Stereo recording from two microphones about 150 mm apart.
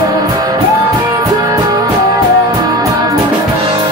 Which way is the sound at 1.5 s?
25° right (ahead or behind).